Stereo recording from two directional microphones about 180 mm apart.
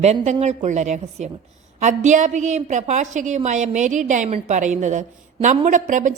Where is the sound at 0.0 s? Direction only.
35° right (ahead or behind).